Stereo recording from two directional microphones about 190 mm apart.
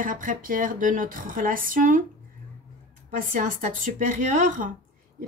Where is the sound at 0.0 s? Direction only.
45° right (ahead or behind).